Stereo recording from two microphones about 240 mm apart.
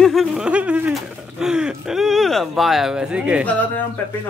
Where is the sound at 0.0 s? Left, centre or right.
Centre.